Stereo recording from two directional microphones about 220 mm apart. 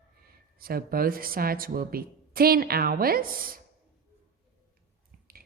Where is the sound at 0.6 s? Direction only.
40° right (ahead or behind).